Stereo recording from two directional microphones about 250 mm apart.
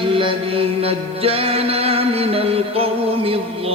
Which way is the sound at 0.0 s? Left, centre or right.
Right.